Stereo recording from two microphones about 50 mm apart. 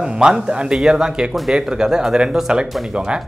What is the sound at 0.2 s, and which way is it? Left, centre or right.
Speech, centre.